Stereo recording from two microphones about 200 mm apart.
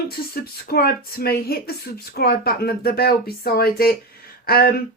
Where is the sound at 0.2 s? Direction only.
50° left (ahead or behind).